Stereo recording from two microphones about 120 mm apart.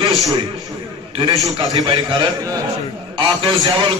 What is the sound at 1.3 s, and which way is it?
Speech, 30° right (ahead or behind).